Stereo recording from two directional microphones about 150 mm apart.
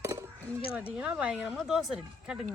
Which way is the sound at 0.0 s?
20° right (ahead or behind).